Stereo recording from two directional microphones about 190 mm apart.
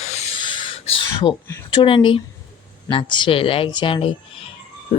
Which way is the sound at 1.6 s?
25° left (ahead or behind).